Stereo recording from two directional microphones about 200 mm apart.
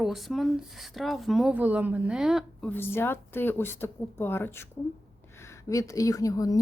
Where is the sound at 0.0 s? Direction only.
Centre (ahead or behind).